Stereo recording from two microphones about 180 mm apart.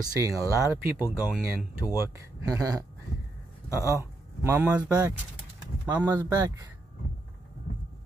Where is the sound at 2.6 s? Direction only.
20° right (ahead or behind).